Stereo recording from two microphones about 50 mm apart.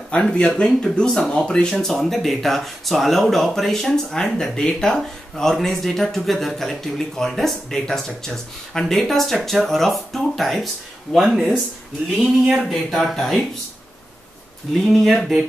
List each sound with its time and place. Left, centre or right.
0.1 s speech: centre
11.2 s speech: centre
12.6 s speech: centre
14.7 s speech: centre